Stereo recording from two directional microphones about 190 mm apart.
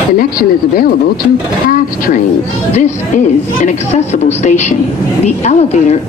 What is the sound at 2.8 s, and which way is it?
Speech, 40° left (ahead or behind).